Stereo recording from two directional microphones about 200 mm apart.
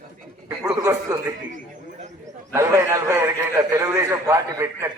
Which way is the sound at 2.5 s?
15° right (ahead or behind).